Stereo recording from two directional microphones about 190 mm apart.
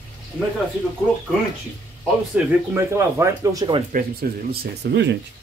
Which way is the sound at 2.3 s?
10° right (ahead or behind).